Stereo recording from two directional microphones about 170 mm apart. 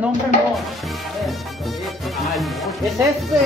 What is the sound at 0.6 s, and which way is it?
Speech, centre (ahead or behind).